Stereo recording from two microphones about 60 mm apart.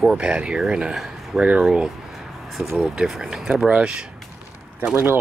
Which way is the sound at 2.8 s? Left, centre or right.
Centre.